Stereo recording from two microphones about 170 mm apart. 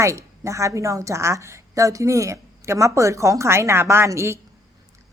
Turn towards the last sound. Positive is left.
turn(degrees=-15)  # may be behind; listen again after turning